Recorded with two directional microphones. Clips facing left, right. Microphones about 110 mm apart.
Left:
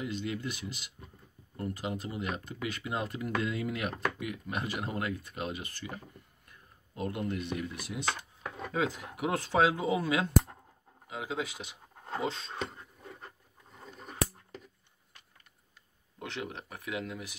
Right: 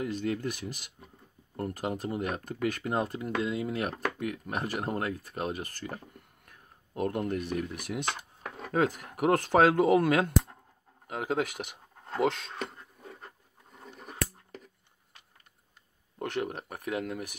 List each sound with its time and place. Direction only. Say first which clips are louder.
0.0 s speech: right 4 dB; 45° right (ahead or behind)
4.2 s speech: right 3 dB; 45° right (ahead or behind)
6.1 s a sound: right 2 dB; 60° right (ahead or behind)
7.5 s speech: right 4 dB; 55° right (ahead or behind)
12.5 s beatboxing: even; 5° right (ahead or behind)
16.2 s speech: right 6 dB; 50° right (ahead or behind)